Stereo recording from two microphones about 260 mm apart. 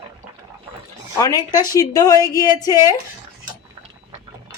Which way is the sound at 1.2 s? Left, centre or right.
Centre.